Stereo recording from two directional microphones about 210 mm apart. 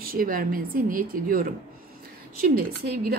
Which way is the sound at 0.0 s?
45° right (ahead or behind).